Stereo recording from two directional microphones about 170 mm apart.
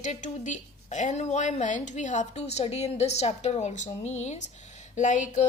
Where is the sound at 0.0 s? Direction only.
45° left (ahead or behind).